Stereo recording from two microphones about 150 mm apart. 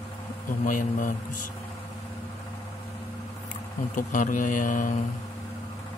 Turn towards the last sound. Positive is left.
turn(degrees=60)  # may be behind; listen again after turning